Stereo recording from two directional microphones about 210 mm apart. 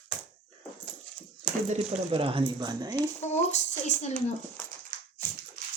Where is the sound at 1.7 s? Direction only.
25° right (ahead or behind).